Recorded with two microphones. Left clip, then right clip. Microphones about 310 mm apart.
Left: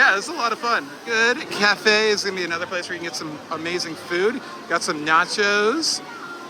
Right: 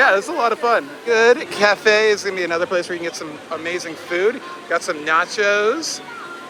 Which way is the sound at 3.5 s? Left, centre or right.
Centre.